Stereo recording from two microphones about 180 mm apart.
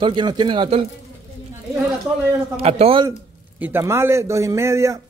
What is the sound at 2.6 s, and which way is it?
Speech, 35° right (ahead or behind).